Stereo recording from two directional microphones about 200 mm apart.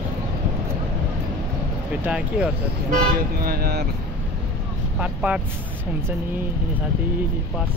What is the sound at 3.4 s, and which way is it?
Speech, 50° right (ahead or behind).